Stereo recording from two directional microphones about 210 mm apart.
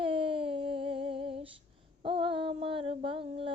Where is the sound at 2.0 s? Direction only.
25° right (ahead or behind).